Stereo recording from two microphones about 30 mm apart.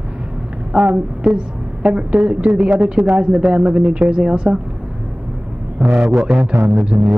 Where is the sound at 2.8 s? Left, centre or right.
Right.